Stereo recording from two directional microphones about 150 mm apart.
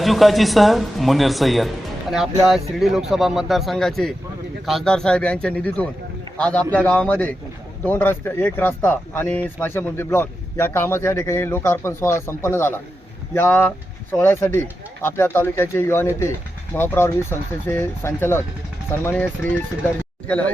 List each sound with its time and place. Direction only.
0.0 s speech: centre (ahead or behind)